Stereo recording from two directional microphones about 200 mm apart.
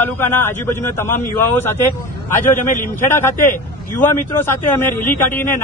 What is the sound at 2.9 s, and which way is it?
Speech, 10° left (ahead or behind).